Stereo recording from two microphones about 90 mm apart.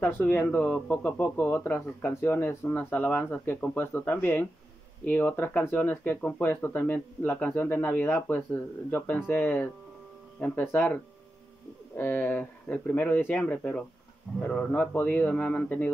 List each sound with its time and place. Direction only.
0.0 s speech: 20° left (ahead or behind)
12.0 s speech: 20° left (ahead or behind)
13.4 s a man's voice: 10° left (ahead or behind)